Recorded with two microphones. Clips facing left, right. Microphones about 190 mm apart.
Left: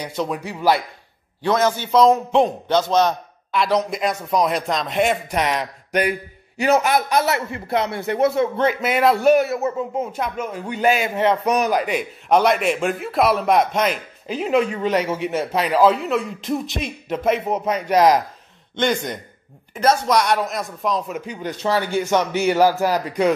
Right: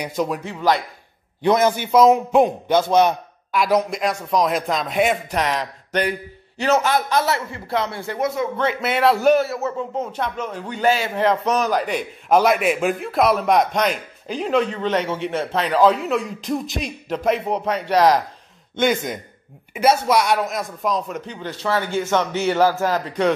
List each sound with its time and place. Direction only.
0.0 s a man's voice: 10° right (ahead or behind)
0.6 s a man's voice: 5° left (ahead or behind)
1.4 s a man's voice: 15° right (ahead or behind)
3.9 s a man's voice: 5° left (ahead or behind)
18.8 s a man's voice: 5° right (ahead or behind)